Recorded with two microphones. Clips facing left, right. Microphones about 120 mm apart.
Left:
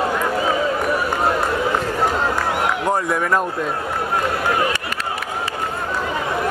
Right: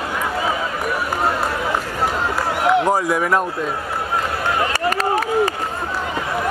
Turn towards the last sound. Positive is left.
turn(degrees=-40)  # may be behind; listen again after turning